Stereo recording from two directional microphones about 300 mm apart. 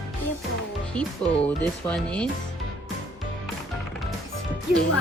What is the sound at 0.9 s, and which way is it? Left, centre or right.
Speech, centre.